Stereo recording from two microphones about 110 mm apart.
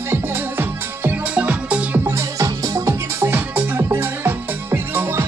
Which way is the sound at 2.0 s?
25° right (ahead or behind).